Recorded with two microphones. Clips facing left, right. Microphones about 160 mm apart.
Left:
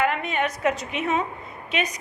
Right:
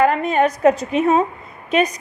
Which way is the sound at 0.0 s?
40° right (ahead or behind).